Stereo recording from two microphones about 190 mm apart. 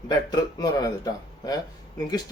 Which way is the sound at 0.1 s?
20° left (ahead or behind).